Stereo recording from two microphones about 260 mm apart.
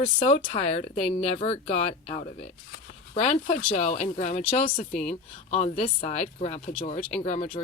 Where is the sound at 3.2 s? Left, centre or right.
Left.